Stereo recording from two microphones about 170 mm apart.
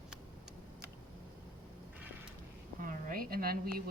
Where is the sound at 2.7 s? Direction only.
55° right (ahead or behind).